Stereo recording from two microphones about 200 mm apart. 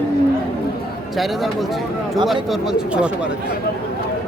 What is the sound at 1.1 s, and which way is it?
Speech, centre (ahead or behind).